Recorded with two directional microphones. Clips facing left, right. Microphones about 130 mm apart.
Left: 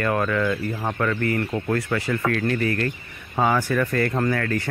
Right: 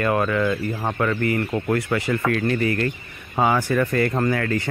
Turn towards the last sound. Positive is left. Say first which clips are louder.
# right 1 dB
turn(degrees=-20)  # may be behind; listen again after turning